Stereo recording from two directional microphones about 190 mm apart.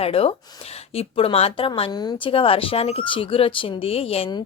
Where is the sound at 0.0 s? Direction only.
30° left (ahead or behind).